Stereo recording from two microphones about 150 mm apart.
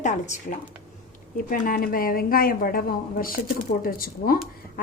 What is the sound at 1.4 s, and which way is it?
A woman's voice, 70° left (ahead or behind).